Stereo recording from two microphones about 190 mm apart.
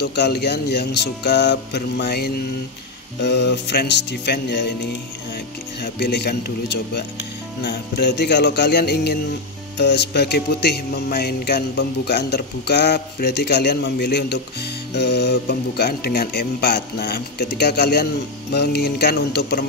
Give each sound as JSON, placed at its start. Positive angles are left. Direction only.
{"t": 0.0, "sound": "speech", "side_deg": 60}
{"t": 5.8, "sound": "speech", "side_deg": 60}